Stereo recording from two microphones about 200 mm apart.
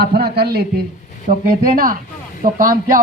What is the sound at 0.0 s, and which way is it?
A man's voice, 50° right (ahead or behind).